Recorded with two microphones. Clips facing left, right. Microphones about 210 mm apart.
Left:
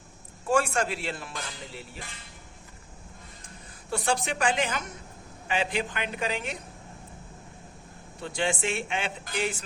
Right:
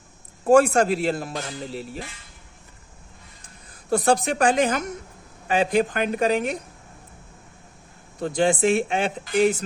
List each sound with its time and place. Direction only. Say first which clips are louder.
0.4 s speech: right 9 dB; 40° right (ahead or behind)
3.8 s speech: right 8 dB; 40° right (ahead or behind)
8.2 s speech: right 9 dB; 40° right (ahead or behind)